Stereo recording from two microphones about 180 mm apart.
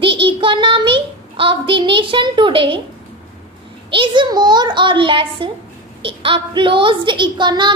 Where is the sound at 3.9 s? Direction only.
25° right (ahead or behind).